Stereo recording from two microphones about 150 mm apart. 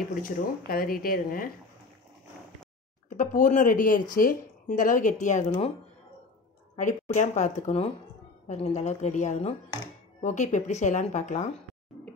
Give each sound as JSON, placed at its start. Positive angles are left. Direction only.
{"t": 0.2, "sound": "speech", "side_deg": 75}
{"t": 3.1, "sound": "speech", "side_deg": 60}
{"t": 6.8, "sound": "speech", "side_deg": 55}